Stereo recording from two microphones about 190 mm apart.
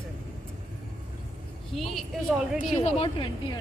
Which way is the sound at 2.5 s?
35° left (ahead or behind).